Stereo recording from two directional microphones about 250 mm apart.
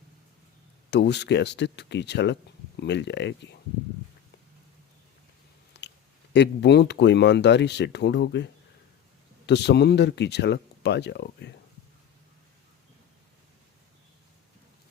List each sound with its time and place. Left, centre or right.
0.9 s speech: left
5.7 s a sound: left
6.3 s speech: left
9.5 s speech: left